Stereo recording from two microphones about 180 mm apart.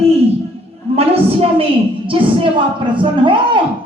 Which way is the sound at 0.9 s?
35° right (ahead or behind).